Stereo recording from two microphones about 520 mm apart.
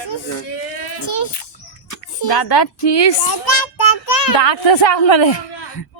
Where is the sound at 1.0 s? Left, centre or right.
Left.